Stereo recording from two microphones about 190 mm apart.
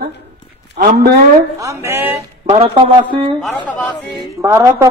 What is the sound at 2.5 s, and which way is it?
Speech, 30° right (ahead or behind).